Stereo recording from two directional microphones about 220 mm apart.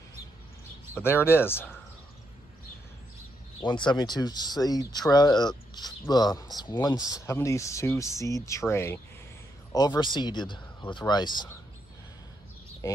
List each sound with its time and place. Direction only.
0.9 s speech: 10° left (ahead or behind)
3.6 s speech: 20° left (ahead or behind)